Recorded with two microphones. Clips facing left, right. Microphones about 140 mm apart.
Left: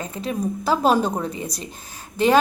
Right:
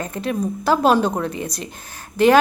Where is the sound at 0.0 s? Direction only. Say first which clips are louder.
Right 2 dB; centre (ahead or behind).